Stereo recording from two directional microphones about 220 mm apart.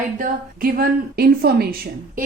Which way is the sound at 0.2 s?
40° right (ahead or behind).